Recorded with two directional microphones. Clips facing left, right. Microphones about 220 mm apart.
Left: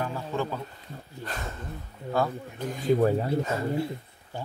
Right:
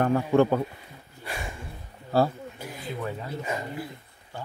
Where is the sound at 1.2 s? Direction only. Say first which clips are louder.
Right 1 dB; 10° right (ahead or behind).